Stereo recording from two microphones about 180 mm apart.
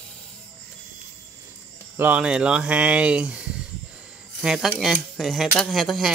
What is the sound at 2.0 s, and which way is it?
Speech, 10° right (ahead or behind).